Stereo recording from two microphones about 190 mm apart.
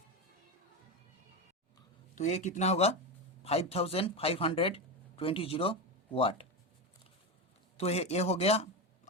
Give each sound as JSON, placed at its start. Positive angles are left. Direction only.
{"t": 2.1, "sound": "speech", "side_deg": 40}
{"t": 7.8, "sound": "speech", "side_deg": 35}